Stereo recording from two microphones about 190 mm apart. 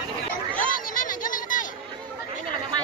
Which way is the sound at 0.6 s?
45° left (ahead or behind).